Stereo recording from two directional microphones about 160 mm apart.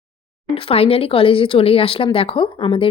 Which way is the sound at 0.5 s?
35° left (ahead or behind).